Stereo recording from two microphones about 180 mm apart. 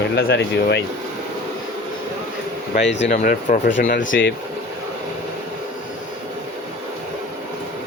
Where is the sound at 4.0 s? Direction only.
90° left.